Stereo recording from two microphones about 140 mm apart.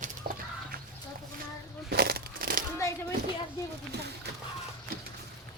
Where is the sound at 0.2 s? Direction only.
65° right (ahead or behind).